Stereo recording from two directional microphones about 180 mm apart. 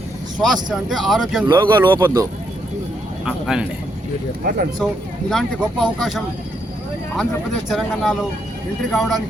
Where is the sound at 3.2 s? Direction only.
5° right (ahead or behind).